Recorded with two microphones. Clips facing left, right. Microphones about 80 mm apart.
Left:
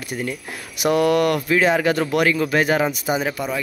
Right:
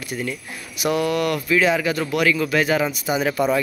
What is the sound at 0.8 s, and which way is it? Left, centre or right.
Speech, left.